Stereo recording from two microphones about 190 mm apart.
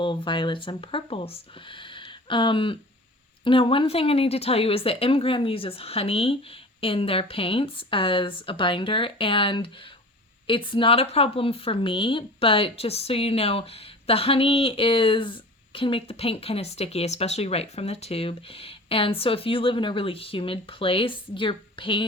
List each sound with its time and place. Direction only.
0.3 s a woman's voice: 25° left (ahead or behind)